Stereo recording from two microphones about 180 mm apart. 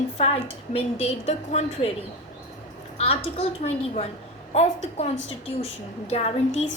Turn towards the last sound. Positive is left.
turn(degrees=35)  # may be behind; listen again after turning